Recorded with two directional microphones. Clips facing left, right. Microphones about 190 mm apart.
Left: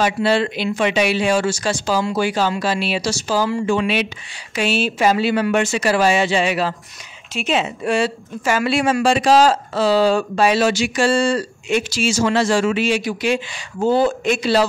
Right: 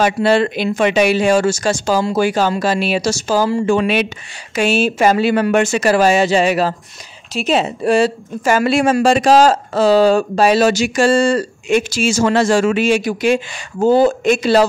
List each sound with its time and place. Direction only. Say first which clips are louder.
0.0 s a woman's voice: right 4 dB; 50° right (ahead or behind)